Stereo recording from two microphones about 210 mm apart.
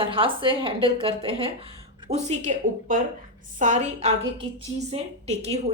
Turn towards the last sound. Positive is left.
turn(degrees=-30)  # may be behind; listen again after turning